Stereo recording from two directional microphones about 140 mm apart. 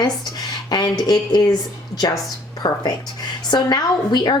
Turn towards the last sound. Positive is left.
turn(degrees=30)  # may be behind; listen again after turning